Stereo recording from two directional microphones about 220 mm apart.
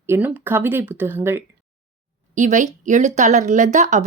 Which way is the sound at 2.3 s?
35° right (ahead or behind).